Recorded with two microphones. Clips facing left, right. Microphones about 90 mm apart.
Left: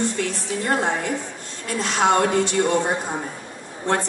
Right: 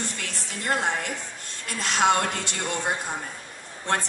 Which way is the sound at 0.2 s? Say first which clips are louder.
Left 9 dB; 20° left (ahead or behind).